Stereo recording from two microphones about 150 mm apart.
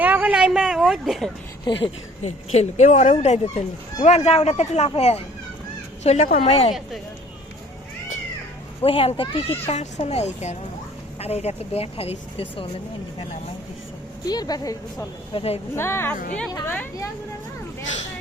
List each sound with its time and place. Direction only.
0.0 s speech: 10° right (ahead or behind)
1.7 s speech: 30° left (ahead or behind)
2.2 s speech: 45° left (ahead or behind)
8.8 s speech: 40° left (ahead or behind)
14.3 s speech: 25° left (ahead or behind)
15.3 s speech: 40° left (ahead or behind)
15.7 s a woman's voice: 15° left (ahead or behind)
16.1 s a woman's voice: 65° left (ahead or behind)